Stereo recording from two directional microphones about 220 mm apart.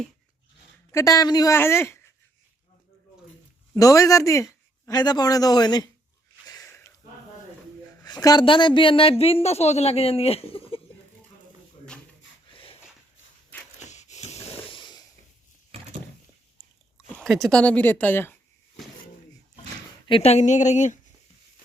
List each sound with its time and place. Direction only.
0.9 s speech: 15° left (ahead or behind)
3.8 s speech: 15° left (ahead or behind)
6.5 s a sound: 15° left (ahead or behind)
8.0 s a woman's voice: 15° left (ahead or behind)
12.5 s a sound: 25° left (ahead or behind)
13.7 s snort: 30° left (ahead or behind)
17.2 s speech: centre (ahead or behind)
20.1 s speech: 25° left (ahead or behind)